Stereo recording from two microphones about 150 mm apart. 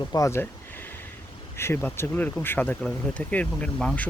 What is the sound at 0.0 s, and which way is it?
Speech, 25° left (ahead or behind).